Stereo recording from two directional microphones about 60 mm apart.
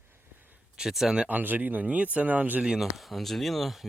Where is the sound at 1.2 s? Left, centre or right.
Right.